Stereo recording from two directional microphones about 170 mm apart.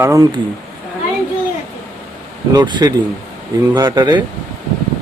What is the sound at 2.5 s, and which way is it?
Speech, 25° right (ahead or behind).